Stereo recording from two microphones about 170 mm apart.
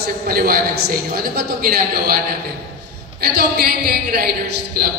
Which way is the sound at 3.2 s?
60° right (ahead or behind).